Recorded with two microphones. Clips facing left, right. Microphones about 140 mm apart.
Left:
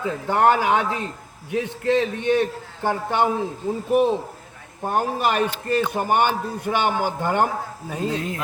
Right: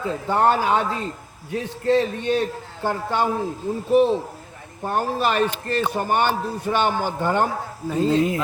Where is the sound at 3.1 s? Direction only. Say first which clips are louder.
Left 2 dB; 20° left (ahead or behind).